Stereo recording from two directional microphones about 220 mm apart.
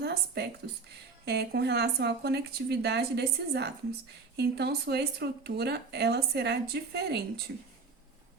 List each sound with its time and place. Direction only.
0.0 s a woman's voice: 45° right (ahead or behind)